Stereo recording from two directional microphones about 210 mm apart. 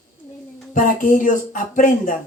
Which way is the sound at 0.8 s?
40° left (ahead or behind).